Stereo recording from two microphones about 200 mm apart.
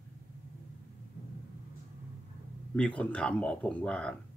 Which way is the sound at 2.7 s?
5° left (ahead or behind).